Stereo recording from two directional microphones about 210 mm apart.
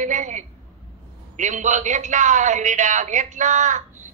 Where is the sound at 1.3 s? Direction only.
35° right (ahead or behind).